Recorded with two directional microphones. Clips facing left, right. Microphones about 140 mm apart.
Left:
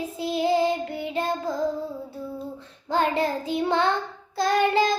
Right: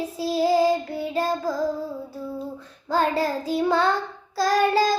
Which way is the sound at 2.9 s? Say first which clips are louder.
Right 1 dB; 25° left (ahead or behind).